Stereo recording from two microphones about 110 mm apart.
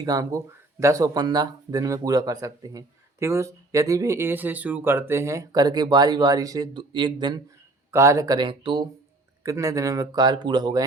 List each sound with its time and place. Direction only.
0.0 s speech: 35° right (ahead or behind)
6.7 s speech: 45° right (ahead or behind)
7.9 s speech: 25° right (ahead or behind)
8.4 s speech: 45° right (ahead or behind)
9.4 s speech: 30° right (ahead or behind)